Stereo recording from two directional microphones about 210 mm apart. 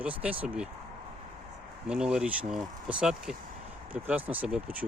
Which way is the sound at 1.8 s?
5° right (ahead or behind).